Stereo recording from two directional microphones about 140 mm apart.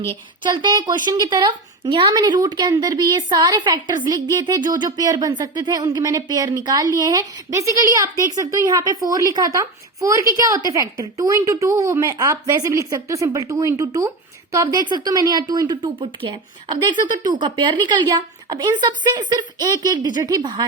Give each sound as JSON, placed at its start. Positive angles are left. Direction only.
{"t": 0.4, "sound": "a woman's voice", "side_deg": -30}